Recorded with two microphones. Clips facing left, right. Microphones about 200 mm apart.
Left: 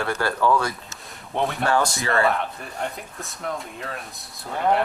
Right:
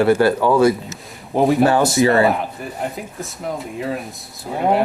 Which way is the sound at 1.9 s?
20° right (ahead or behind).